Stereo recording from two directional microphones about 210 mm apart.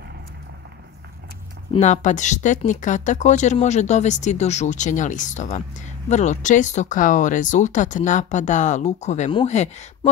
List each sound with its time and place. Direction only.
1.7 s speech: 35° left (ahead or behind)